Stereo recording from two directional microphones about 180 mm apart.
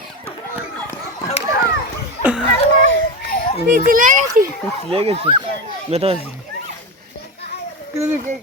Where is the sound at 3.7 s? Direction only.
50° right (ahead or behind).